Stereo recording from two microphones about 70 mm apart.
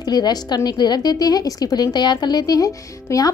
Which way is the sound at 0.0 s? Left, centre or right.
Left.